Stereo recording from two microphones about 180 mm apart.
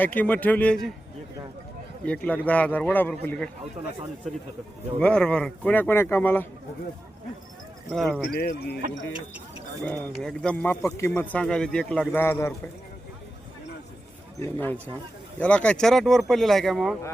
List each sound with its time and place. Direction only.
0.0 s a man's voice: 10° left (ahead or behind)
2.0 s a man's voice: 5° left (ahead or behind)
4.9 s a man's voice: 5° left (ahead or behind)
7.9 s speech: centre (ahead or behind)
8.3 s speech: 60° left (ahead or behind)
9.8 s a man's voice: 5° left (ahead or behind)
14.4 s a man's voice: 10° left (ahead or behind)